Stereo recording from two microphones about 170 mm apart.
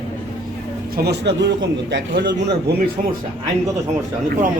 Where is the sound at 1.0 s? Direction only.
85° right.